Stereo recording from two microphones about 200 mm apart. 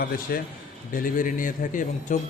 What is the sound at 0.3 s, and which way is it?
A man's voice, 50° left (ahead or behind).